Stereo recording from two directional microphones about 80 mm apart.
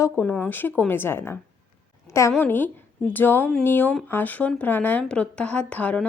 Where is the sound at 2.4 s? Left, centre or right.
Left.